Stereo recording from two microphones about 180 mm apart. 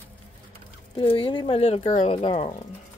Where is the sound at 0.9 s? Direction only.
25° left (ahead or behind).